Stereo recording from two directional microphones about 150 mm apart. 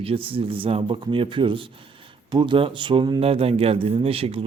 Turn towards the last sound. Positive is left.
turn(degrees=-40)  # may be behind; listen again after turning